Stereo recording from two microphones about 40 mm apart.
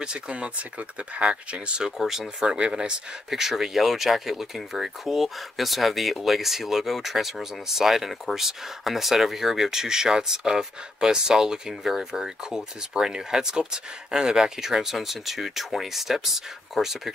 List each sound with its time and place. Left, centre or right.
0.0 s speech: right
1.9 s speech: centre
2.4 s speech: right